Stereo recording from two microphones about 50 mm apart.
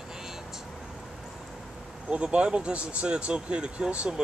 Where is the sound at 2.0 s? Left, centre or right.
Right.